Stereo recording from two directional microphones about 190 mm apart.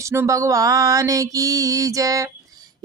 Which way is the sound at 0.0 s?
15° right (ahead or behind).